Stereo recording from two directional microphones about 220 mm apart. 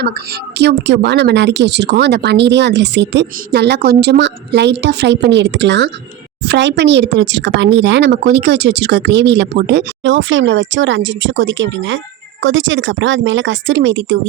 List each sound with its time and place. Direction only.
0.6 s speech: 50° right (ahead or behind)